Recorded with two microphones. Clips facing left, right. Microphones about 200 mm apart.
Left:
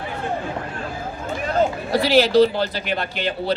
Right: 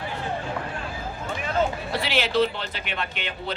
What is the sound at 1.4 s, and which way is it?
Speech, 40° left (ahead or behind).